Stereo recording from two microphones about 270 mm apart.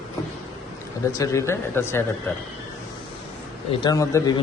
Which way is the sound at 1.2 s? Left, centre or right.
Centre.